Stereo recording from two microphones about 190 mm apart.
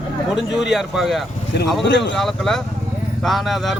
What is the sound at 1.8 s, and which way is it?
Speech, 70° left (ahead or behind).